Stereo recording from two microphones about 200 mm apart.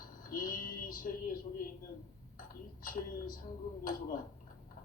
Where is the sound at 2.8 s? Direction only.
45° left (ahead or behind).